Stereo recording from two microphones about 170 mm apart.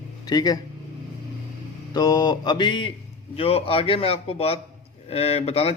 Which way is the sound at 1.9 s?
25° left (ahead or behind).